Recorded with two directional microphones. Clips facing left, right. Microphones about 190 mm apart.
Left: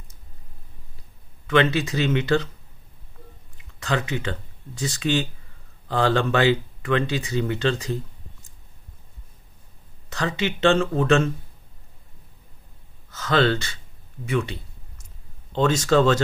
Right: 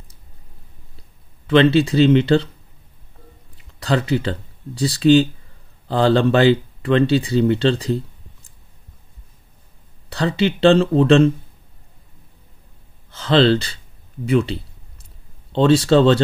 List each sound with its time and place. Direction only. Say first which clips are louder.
1.5 s speech: right 7 dB; 30° right (ahead or behind)
3.8 s speech: right 6 dB; 35° right (ahead or behind)
10.0 s speech: right 7 dB; 35° right (ahead or behind)
13.1 s speech: right 6 dB; 30° right (ahead or behind)
14.2 s a sound: right 7 dB; 30° right (ahead or behind)
15.5 s speech: right 5 dB; 30° right (ahead or behind)